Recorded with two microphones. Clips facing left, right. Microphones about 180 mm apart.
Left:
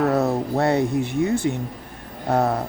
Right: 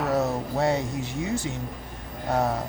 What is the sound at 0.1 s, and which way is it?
Speech, 60° left (ahead or behind).